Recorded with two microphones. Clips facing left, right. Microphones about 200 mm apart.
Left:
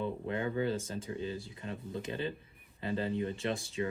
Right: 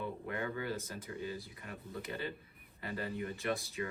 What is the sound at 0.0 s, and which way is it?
Speech, 25° left (ahead or behind).